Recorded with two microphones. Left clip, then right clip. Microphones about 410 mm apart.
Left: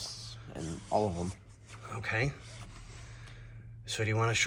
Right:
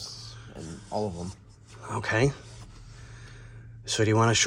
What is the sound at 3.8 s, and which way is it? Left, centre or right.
Speech, centre.